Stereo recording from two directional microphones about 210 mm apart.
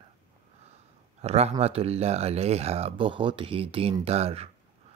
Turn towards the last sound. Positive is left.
turn(degrees=-30)  # may be behind; listen again after turning